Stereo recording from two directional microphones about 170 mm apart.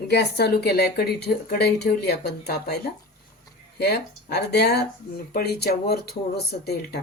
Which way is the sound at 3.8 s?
70° left (ahead or behind).